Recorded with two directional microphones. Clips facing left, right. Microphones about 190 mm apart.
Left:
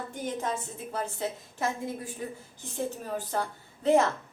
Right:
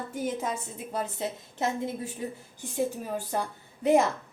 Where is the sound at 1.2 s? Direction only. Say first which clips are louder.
Right 1 dB; 20° right (ahead or behind).